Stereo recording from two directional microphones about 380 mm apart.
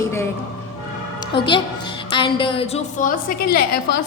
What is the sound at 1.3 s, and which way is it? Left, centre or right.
A woman's voice, centre.